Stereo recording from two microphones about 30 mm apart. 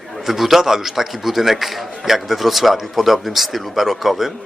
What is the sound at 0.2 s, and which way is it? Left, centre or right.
A man's voice, centre.